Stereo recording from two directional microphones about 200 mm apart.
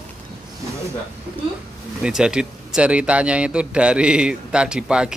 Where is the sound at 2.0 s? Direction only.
5° right (ahead or behind).